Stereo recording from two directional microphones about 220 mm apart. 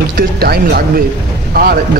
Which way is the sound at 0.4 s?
45° right (ahead or behind).